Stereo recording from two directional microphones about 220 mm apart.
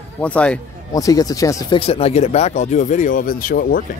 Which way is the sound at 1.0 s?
15° left (ahead or behind).